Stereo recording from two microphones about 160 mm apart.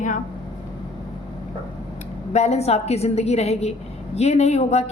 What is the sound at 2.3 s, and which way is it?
A woman's voice, 45° left (ahead or behind).